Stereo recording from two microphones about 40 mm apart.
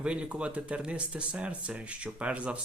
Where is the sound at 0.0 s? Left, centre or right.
Right.